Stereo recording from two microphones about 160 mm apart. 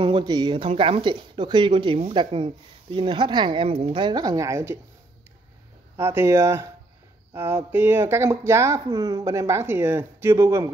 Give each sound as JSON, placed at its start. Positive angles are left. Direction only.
{"t": 0.0, "sound": "speech", "side_deg": -30}
{"t": 5.9, "sound": "speech", "side_deg": -15}